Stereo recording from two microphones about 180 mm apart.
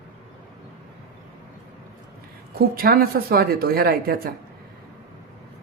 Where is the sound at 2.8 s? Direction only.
55° right (ahead or behind).